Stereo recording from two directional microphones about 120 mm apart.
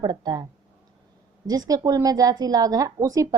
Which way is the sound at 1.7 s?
30° right (ahead or behind).